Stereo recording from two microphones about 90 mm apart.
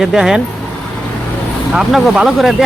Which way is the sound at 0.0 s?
5° right (ahead or behind).